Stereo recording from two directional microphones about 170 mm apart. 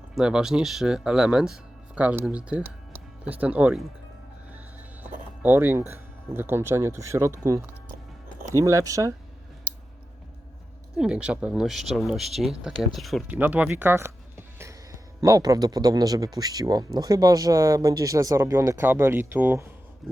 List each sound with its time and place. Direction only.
0.2 s speech: 5° right (ahead or behind)
5.4 s speech: 10° right (ahead or behind)
10.9 s speech: 5° right (ahead or behind)
13.3 s speech: 10° right (ahead or behind)